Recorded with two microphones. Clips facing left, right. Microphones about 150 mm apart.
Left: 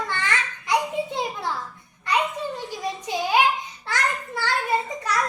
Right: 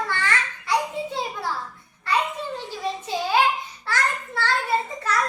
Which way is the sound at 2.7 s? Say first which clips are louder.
Right 1 dB; 15° left (ahead or behind).